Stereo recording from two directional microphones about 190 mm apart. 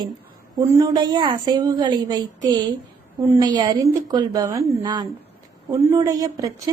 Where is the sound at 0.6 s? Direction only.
15° right (ahead or behind).